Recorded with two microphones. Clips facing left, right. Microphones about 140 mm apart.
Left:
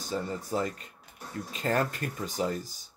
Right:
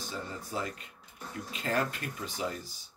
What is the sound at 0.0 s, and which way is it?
Speech, 40° left (ahead or behind).